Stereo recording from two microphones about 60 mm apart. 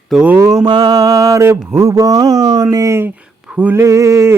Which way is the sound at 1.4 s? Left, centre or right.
Right.